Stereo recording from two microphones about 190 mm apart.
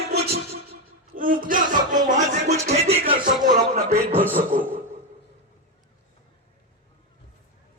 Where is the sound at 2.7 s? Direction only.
35° right (ahead or behind).